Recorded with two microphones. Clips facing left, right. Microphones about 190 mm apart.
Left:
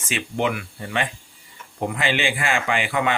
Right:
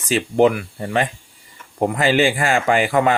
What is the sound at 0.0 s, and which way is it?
Speech, 35° right (ahead or behind).